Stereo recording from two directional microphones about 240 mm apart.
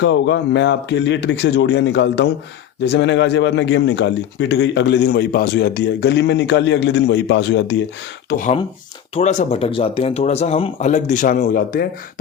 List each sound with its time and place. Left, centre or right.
0.0 s a man's voice: left
8.3 s speech: left